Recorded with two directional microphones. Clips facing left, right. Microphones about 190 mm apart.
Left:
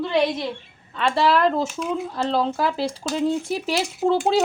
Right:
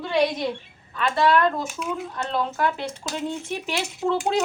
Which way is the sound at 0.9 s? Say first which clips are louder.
Left 1 dB; 30° left (ahead or behind).